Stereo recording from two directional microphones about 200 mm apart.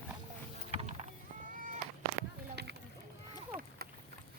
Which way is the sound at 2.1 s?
45° right (ahead or behind).